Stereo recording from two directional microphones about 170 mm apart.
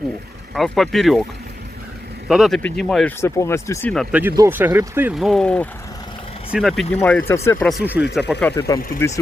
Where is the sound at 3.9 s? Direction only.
Centre (ahead or behind).